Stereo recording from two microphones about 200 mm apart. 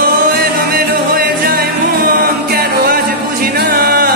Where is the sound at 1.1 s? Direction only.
50° right (ahead or behind).